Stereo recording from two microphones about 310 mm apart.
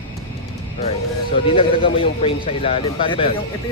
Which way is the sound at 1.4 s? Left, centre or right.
Centre.